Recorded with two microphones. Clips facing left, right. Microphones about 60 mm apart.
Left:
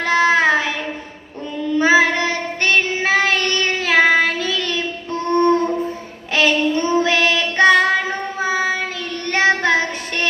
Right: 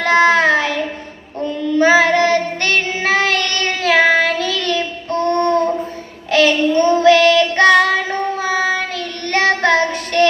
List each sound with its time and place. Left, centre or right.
0.3 s child singing: left
1.8 s child singing: centre